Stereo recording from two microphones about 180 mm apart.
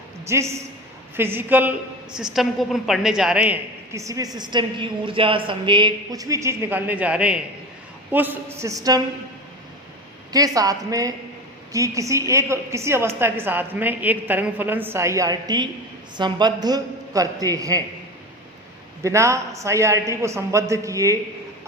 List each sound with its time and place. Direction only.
0.3 s a woman's voice: 15° right (ahead or behind)
3.9 s a woman's voice: 20° right (ahead or behind)
10.3 s a woman's voice: 20° right (ahead or behind)
19.0 s a woman's voice: 15° right (ahead or behind)